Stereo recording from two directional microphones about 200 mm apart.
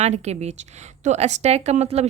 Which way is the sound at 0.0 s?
35° right (ahead or behind).